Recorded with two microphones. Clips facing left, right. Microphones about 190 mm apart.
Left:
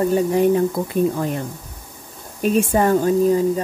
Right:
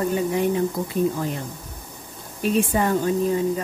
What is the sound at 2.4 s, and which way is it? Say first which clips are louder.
Speech: left 4 dB; 45° left (ahead or behind).